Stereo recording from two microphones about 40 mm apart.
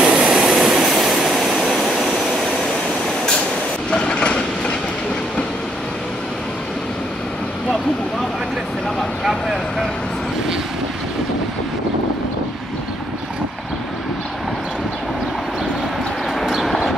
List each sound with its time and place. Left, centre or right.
0.0 s train: right
0.4 s train: centre
3.9 s train: left
9.2 s vehicle: centre
16.6 s a sound: centre